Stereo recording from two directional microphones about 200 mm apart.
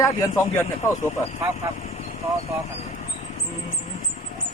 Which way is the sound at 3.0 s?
40° left (ahead or behind).